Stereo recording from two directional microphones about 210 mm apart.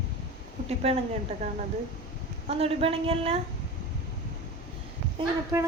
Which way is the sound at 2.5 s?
25° right (ahead or behind).